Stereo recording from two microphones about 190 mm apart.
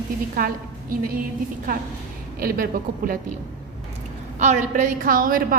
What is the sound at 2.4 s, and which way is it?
Speech, 50° right (ahead or behind).